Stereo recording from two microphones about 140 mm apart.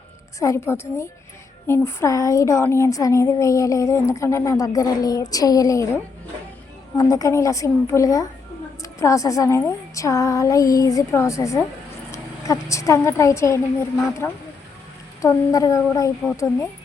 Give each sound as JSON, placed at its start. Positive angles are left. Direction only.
{"t": 0.3, "sound": "a woman's voice", "side_deg": 20}